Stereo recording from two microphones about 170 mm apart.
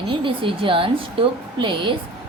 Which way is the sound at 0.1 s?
30° right (ahead or behind).